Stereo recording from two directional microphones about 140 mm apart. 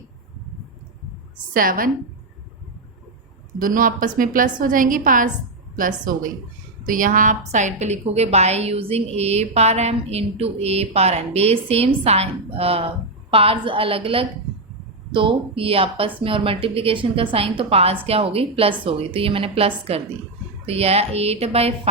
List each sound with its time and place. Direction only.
1.5 s a woman's voice: 85° right
3.6 s a woman's voice: 85° right; by 21.8 s 45° right (ahead or behind)